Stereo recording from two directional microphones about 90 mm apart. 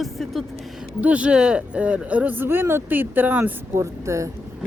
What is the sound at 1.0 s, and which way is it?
Speech, 15° right (ahead or behind).